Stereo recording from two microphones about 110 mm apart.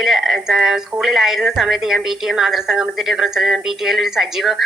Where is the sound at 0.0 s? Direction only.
Centre (ahead or behind).